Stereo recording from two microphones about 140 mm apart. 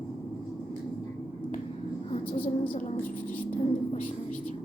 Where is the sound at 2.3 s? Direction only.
75° left (ahead or behind).